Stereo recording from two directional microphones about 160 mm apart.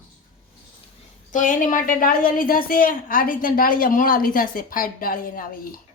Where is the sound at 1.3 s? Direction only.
55° left (ahead or behind).